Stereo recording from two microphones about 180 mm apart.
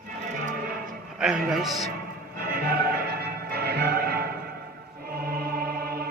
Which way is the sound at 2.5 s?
55° right (ahead or behind).